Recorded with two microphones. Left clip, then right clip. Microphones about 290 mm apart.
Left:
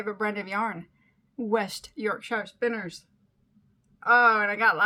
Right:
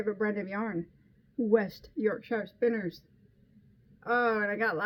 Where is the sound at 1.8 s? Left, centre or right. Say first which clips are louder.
Left 1 dB; left.